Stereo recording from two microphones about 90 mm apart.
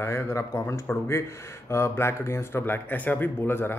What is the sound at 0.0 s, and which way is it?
Speech, 30° left (ahead or behind).